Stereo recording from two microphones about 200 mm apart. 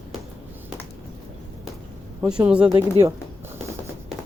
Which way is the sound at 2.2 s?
10° right (ahead or behind).